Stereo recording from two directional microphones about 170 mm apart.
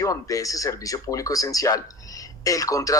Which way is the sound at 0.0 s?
20° left (ahead or behind).